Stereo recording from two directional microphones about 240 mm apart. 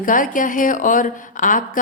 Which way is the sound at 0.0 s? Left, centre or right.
Left.